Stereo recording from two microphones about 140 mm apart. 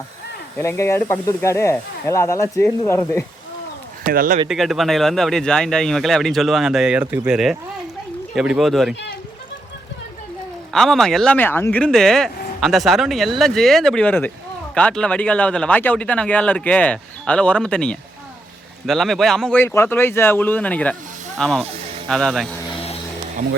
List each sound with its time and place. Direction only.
0.6 s speech: 20° left (ahead or behind)
4.0 s speech: 90° right
4.4 s speech: centre (ahead or behind)
10.7 s speech: centre (ahead or behind)
11.3 s speech: 15° left (ahead or behind)
19.5 s speech: 20° left (ahead or behind); by 22.4 s centre (ahead or behind)